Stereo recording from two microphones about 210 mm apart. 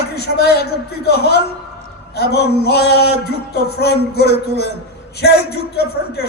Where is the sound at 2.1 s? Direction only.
50° left (ahead or behind).